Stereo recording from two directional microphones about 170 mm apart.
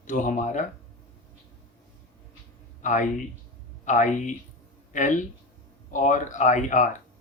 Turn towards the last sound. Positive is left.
turn(degrees=50)  # may be behind; listen again after turning